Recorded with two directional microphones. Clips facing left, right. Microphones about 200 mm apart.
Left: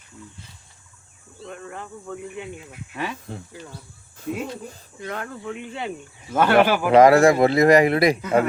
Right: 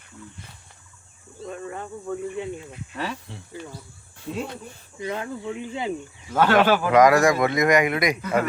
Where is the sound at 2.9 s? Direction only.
15° left (ahead or behind).